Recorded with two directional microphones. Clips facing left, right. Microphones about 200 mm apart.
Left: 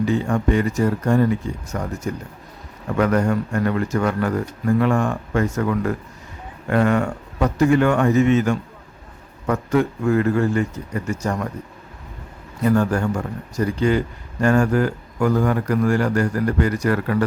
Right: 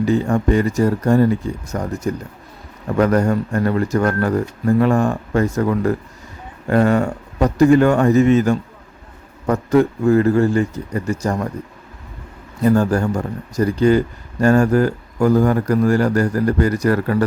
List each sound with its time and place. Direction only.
0.0 s speech: 40° right (ahead or behind)
3.0 s speech: 35° right (ahead or behind)
12.6 s speech: 35° right (ahead or behind)